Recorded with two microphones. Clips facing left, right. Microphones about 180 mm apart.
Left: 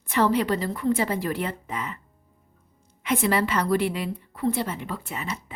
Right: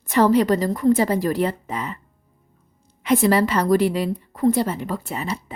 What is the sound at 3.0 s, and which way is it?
A woman's voice, 35° right (ahead or behind).